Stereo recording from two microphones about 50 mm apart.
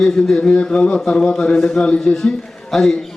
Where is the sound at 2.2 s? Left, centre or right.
Centre.